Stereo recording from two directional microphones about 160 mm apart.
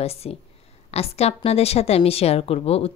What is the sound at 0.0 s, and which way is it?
A woman's voice, 40° left (ahead or behind).